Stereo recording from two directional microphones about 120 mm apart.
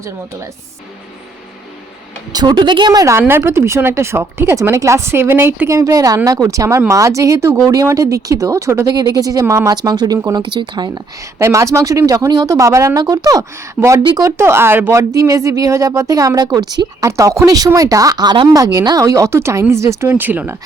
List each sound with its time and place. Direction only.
2.3 s speech: 35° right (ahead or behind)
14.0 s speech: 40° right (ahead or behind)
14.3 s speech: 20° right (ahead or behind)